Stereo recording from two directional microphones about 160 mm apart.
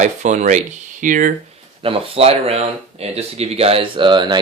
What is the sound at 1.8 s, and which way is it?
Speech, 35° right (ahead or behind).